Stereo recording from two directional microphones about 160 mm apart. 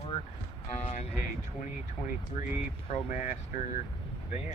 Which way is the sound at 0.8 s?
40° left (ahead or behind).